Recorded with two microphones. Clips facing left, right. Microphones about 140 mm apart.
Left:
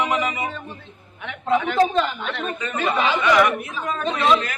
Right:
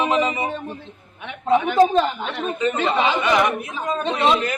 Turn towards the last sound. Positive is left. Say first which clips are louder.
# right 1 dB
turn(degrees=-25)  # may be behind; listen again after turning